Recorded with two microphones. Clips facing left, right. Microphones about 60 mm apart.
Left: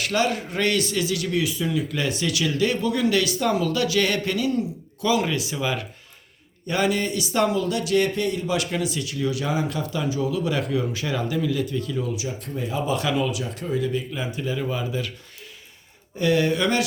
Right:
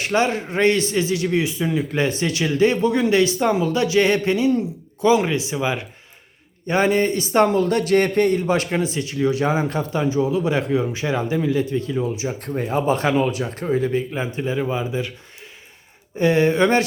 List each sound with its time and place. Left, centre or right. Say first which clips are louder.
0.0 s speech: right 3 dB; right
16.1 s speech: right 4 dB; right